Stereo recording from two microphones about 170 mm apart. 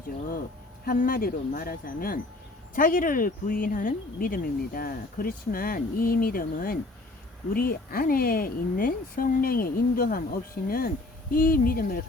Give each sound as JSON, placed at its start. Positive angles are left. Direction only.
{"t": 0.9, "sound": "speech", "side_deg": 60}